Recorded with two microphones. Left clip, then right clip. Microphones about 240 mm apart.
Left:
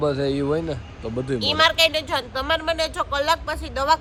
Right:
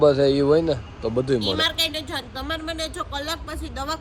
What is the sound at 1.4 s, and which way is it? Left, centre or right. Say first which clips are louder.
A woman's voice: left 5 dB; centre.